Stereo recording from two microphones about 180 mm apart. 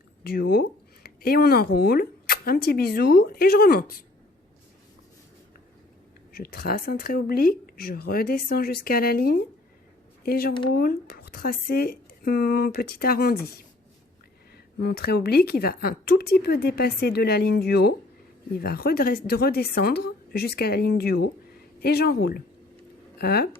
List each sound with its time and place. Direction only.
0.3 s speech: 60° left (ahead or behind)
6.3 s speech: 55° left (ahead or behind)
14.8 s speech: 60° left (ahead or behind)